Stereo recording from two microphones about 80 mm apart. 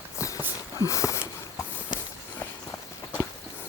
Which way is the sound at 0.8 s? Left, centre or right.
Left.